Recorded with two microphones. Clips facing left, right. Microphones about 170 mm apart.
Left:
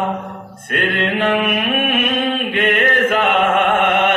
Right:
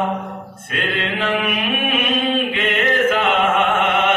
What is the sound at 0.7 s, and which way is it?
Mantra, 55° left (ahead or behind).